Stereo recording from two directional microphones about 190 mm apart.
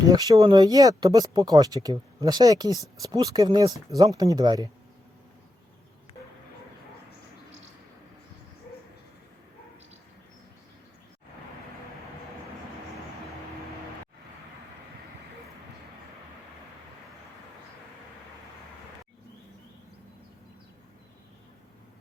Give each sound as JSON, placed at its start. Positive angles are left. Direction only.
{"t": 0.1, "sound": "speech", "side_deg": -20}